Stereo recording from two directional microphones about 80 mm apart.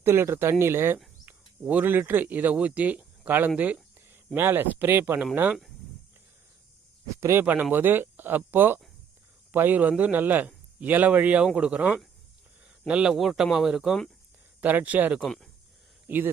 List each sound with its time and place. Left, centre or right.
0.0 s speech: right
1.2 s speech: right
7.2 s speech: right
7.4 s speech: right; by 13.9 s centre
14.6 s speech: right
15.2 s speech: centre
16.0 s speech: right